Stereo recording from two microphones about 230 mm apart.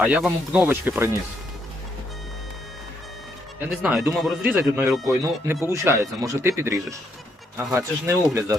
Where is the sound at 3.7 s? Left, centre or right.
Centre.